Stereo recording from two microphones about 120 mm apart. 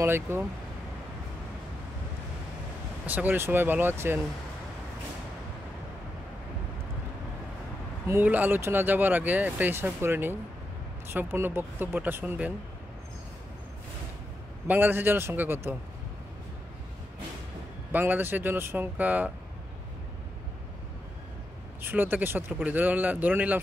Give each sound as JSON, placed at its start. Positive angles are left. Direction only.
{"t": 0.0, "sound": "speech", "side_deg": -20}
{"t": 3.1, "sound": "speech", "side_deg": -15}
{"t": 8.1, "sound": "speech", "side_deg": -15}
{"t": 14.7, "sound": "speech", "side_deg": -15}
{"t": 17.9, "sound": "speech", "side_deg": -15}
{"t": 21.8, "sound": "speech", "side_deg": -15}